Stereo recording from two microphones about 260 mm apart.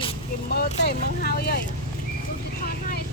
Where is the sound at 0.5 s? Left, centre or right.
Left.